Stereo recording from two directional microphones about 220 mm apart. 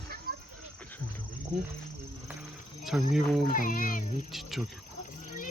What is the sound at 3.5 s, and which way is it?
Speech, 40° left (ahead or behind).